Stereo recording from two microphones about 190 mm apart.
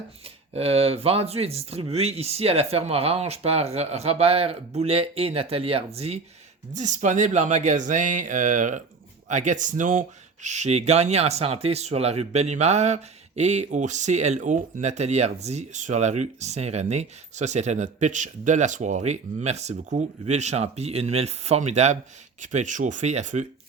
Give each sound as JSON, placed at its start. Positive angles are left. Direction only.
{"t": 0.5, "sound": "speech", "side_deg": -30}